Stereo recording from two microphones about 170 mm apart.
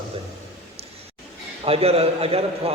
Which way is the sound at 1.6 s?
35° right (ahead or behind).